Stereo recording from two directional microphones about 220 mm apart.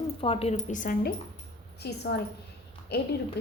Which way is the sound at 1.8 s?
50° left (ahead or behind).